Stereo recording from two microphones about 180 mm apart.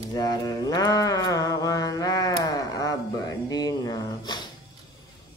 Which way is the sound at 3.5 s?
20° left (ahead or behind).